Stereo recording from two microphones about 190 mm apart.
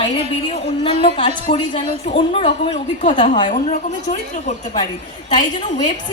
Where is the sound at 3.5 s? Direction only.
40° left (ahead or behind).